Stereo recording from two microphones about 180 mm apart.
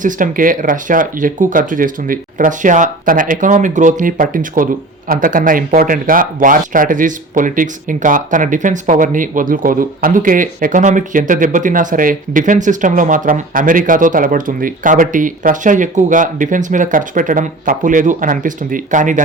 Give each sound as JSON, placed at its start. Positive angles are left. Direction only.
{"t": 0.0, "sound": "speech", "side_deg": -45}